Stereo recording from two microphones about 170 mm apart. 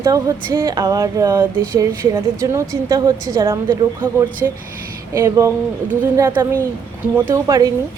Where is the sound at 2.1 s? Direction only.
20° right (ahead or behind).